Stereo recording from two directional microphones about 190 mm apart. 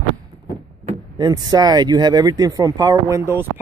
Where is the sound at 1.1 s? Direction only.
20° right (ahead or behind).